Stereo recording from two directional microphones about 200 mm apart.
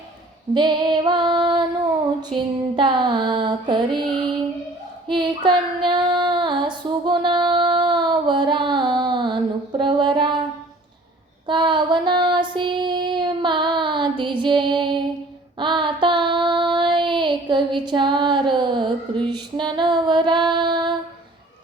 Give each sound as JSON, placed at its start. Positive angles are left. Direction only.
{"t": 0.5, "sound": "female singing", "side_deg": -20}
{"t": 2.3, "sound": "music", "side_deg": -25}
{"t": 5.0, "sound": "child singing", "side_deg": -25}
{"t": 11.4, "sound": "child singing", "side_deg": -25}
{"t": 17.7, "sound": "a sound", "side_deg": -25}